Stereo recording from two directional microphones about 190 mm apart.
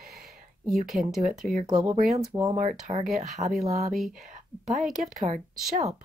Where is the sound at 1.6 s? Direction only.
25° right (ahead or behind).